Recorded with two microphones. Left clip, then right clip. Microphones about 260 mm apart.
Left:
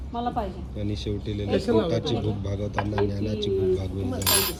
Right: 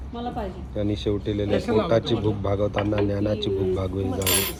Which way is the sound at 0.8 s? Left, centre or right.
Centre.